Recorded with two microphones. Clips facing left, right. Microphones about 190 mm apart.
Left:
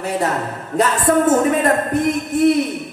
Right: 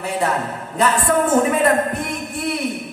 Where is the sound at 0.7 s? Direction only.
40° left (ahead or behind).